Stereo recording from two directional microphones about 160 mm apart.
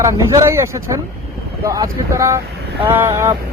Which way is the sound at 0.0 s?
20° right (ahead or behind).